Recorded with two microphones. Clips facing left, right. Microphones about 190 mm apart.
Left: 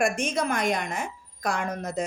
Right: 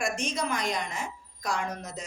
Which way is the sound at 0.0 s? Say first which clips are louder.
Left 5 dB; 55° left (ahead or behind).